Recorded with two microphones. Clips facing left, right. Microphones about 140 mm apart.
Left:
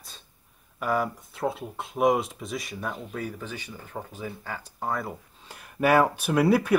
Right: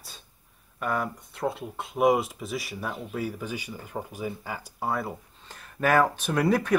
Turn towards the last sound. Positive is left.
turn(degrees=10)  # may be behind; listen again after turning